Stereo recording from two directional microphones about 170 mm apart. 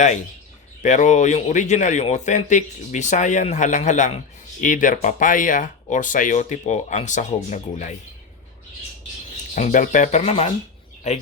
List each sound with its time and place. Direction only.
0.8 s speech: 45° left (ahead or behind)
9.6 s speech: 45° left (ahead or behind)